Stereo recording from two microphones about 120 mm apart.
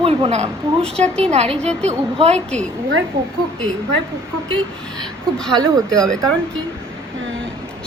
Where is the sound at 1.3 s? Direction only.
60° right (ahead or behind).